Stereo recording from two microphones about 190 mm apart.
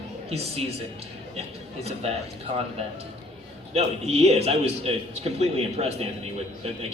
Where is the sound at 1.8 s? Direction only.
35° right (ahead or behind).